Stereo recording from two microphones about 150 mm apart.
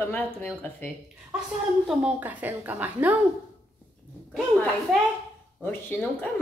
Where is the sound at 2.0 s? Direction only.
10° right (ahead or behind).